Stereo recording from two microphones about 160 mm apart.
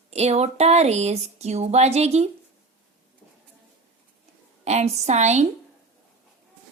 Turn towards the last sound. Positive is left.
turn(degrees=-45)  # may be behind; listen again after turning